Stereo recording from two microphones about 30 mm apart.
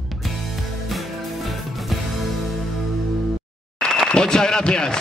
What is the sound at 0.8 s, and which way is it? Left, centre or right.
Music, centre.